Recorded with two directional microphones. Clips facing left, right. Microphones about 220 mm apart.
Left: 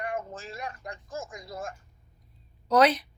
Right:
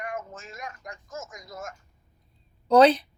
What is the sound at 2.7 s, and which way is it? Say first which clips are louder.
Speech: right 5 dB; 30° right (ahead or behind).